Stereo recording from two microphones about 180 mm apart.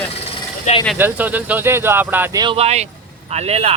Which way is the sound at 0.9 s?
10° right (ahead or behind).